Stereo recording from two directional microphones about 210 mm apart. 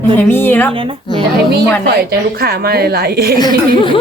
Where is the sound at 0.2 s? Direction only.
10° left (ahead or behind).